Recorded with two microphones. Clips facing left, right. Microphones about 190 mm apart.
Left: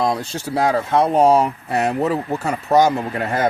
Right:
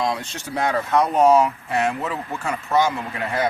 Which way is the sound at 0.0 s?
35° left (ahead or behind).